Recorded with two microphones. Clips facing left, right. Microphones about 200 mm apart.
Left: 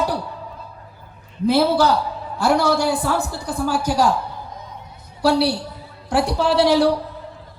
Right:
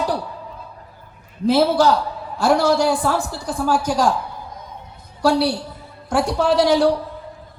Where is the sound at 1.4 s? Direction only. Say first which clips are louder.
Right 1 dB; 60° left (ahead or behind).